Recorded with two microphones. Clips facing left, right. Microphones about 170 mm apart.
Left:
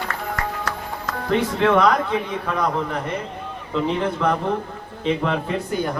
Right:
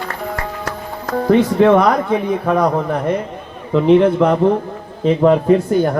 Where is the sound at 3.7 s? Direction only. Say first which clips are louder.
Right 11 dB; 60° right (ahead or behind).